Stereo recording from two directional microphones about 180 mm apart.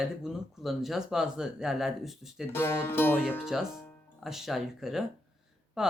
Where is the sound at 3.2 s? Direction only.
Centre (ahead or behind).